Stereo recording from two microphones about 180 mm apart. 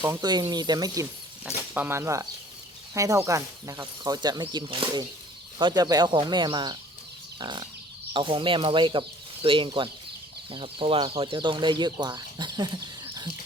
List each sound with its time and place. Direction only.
0.0 s speech: 20° right (ahead or behind)
1.5 s speech: 10° right (ahead or behind)